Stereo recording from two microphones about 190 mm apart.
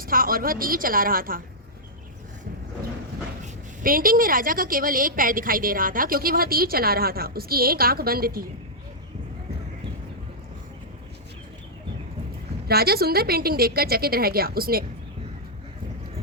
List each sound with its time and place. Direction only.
0.0 s a woman's voice: 50° right (ahead or behind)
3.8 s a woman's voice: 50° right (ahead or behind)
12.6 s a woman's voice: 55° right (ahead or behind)